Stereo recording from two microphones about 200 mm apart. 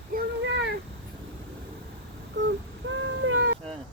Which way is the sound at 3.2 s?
85° right.